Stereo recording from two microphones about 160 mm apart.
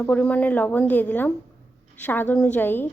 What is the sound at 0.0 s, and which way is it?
A woman's voice, 5° left (ahead or behind).